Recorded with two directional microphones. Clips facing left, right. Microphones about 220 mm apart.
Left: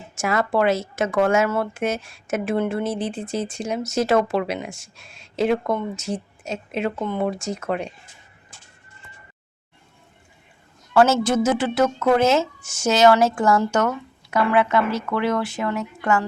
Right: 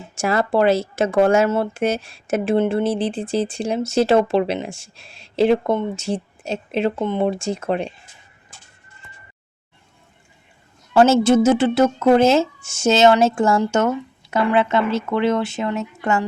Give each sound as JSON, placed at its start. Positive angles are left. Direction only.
{"t": 0.2, "sound": "speech", "side_deg": -30}
{"t": 10.9, "sound": "speech", "side_deg": -25}